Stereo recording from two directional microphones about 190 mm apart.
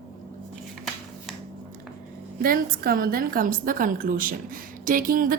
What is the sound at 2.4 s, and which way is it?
A woman's voice, 50° right (ahead or behind).